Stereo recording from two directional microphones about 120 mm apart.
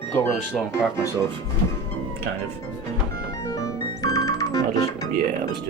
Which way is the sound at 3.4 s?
30° left (ahead or behind).